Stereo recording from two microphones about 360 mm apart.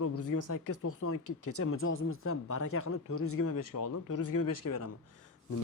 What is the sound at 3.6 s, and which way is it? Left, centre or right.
Speech, left.